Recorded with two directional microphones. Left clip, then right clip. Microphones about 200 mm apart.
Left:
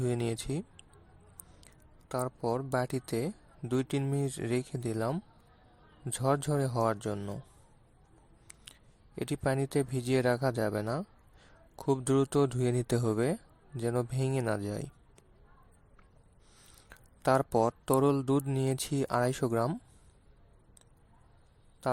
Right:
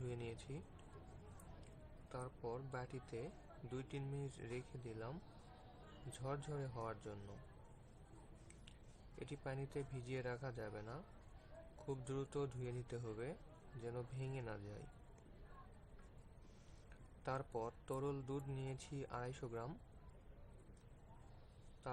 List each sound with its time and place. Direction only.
0.0 s a man's voice: 60° left (ahead or behind)
1.6 s a man's voice: 55° left (ahead or behind)
9.1 s a man's voice: 60° left (ahead or behind)
16.9 s a man's voice: 55° left (ahead or behind)